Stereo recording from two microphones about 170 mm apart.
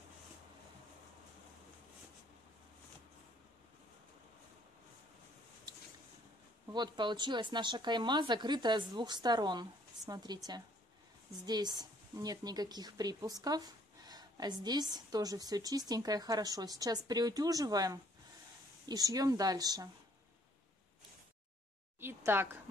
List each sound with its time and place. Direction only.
6.7 s speech: 25° right (ahead or behind)
22.0 s a woman's voice: 15° right (ahead or behind)